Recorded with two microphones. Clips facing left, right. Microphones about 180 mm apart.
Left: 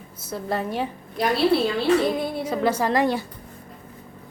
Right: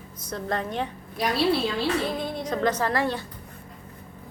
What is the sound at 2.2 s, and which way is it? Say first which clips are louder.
Speech: left 2 dB; 10° left (ahead or behind).